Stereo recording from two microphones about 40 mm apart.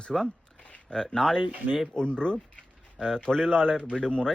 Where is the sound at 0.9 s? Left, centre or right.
Centre.